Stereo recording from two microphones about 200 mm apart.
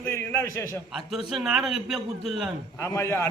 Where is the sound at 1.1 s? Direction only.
Centre (ahead or behind).